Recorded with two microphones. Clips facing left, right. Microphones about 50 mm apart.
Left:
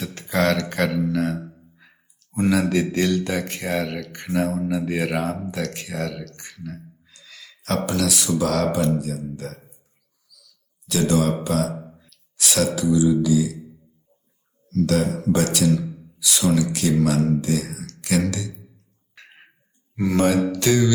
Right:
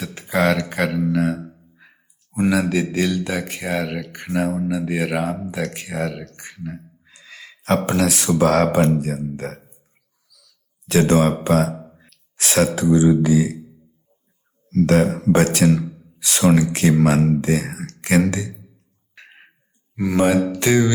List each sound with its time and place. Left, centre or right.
0.0 s a sound: centre
0.9 s music: centre
2.3 s speech: centre
4.4 s music: centre
4.9 s a man's voice: centre; by 9.6 s right
10.3 s a sound: right
14.7 s a man's voice: right
19.1 s a sound: centre
20.0 s music: centre